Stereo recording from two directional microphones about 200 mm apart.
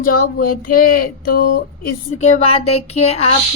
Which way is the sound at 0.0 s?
50° left (ahead or behind).